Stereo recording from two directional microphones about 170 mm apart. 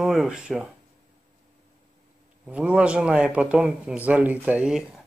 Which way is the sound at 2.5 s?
5° right (ahead or behind).